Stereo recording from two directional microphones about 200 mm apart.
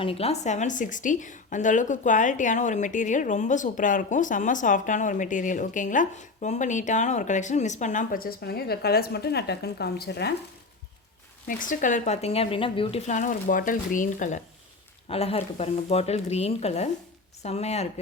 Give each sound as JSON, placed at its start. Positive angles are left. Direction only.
{"t": 0.0, "sound": "a woman's voice", "side_deg": 30}
{"t": 11.4, "sound": "a woman's voice", "side_deg": 40}